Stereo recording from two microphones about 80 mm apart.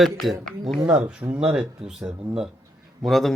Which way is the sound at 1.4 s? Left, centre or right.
Centre.